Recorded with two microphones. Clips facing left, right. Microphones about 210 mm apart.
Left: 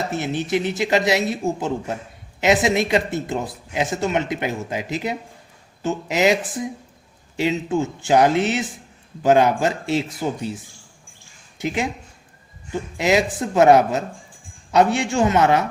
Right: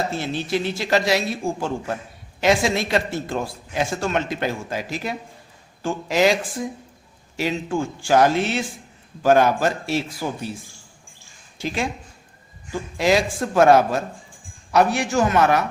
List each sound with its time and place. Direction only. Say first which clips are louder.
0.1 s a man's voice: left 2 dB; 20° left (ahead or behind)